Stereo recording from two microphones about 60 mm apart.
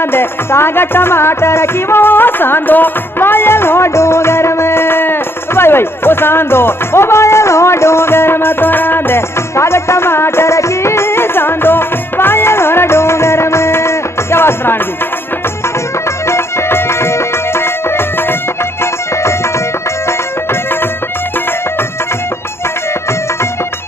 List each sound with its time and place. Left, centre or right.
0.0 s music: left
9.6 s music: left
16.3 s music: left